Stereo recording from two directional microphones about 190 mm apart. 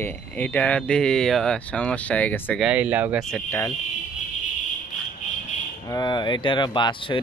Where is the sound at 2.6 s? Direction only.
5° right (ahead or behind).